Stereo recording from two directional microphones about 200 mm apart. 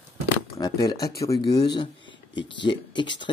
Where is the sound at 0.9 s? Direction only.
50° left (ahead or behind).